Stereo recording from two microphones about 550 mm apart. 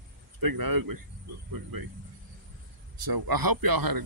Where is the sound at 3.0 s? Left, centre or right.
Right.